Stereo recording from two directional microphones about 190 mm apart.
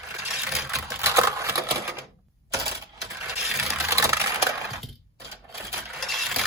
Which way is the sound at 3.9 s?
15° right (ahead or behind).